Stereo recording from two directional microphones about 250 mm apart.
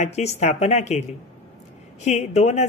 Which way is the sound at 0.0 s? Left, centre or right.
Left.